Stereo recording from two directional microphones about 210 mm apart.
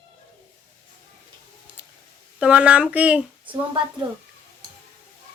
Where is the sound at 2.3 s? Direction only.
5° right (ahead or behind).